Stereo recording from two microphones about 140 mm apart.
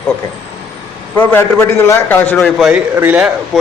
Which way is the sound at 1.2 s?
15° left (ahead or behind).